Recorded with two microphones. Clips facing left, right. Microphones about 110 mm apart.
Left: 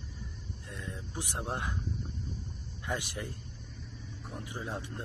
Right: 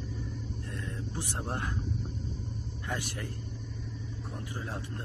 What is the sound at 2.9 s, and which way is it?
Speech, 20° left (ahead or behind).